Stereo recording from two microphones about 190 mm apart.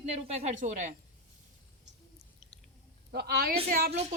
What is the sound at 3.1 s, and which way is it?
Speech, 55° right (ahead or behind).